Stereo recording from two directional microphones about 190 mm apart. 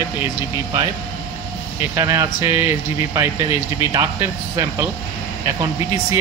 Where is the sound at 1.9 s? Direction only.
15° right (ahead or behind).